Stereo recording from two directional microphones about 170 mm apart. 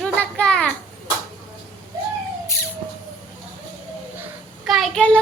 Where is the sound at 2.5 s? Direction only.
20° left (ahead or behind).